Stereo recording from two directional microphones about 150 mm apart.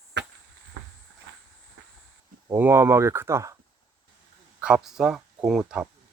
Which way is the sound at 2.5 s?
15° right (ahead or behind).